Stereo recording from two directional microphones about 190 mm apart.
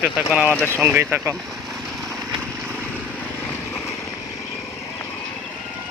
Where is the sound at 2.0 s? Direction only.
Centre (ahead or behind).